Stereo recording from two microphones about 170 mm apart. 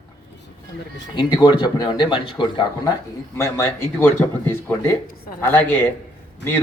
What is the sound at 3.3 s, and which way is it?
Speech, 15° left (ahead or behind).